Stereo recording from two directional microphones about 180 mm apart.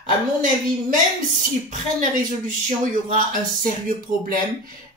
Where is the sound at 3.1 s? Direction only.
50° right (ahead or behind).